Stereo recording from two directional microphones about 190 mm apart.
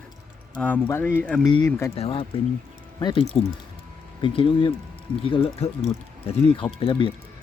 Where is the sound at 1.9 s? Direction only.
30° left (ahead or behind).